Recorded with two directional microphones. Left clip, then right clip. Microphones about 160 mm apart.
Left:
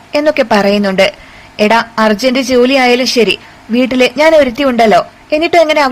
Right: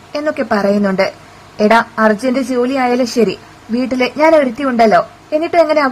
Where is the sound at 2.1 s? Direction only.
30° left (ahead or behind); by 4.3 s 10° left (ahead or behind).